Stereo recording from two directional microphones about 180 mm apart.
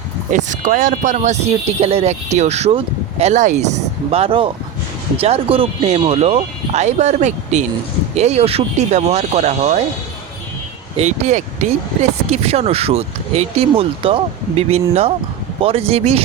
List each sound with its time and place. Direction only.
0.3 s speech: 45° right (ahead or behind)
10.9 s speech: 40° right (ahead or behind)